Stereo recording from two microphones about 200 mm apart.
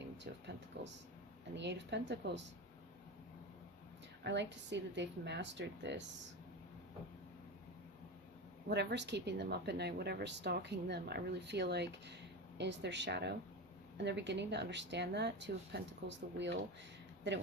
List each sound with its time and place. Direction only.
0.3 s a woman's voice: 55° right (ahead or behind)
4.2 s a woman's voice: 60° right (ahead or behind)
8.7 s a woman's voice: 55° right (ahead or behind)